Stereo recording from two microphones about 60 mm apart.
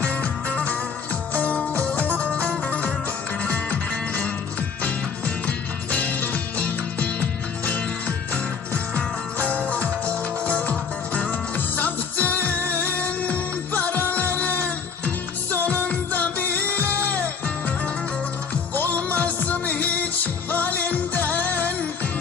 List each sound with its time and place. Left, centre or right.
0.2 s music: left
5.9 s music: left
16.8 s music: right
18.7 s music: left